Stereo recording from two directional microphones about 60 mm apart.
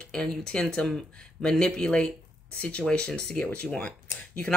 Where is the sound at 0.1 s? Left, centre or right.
Centre.